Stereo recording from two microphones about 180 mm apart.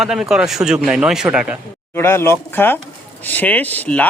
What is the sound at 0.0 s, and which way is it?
A man's voice, centre (ahead or behind).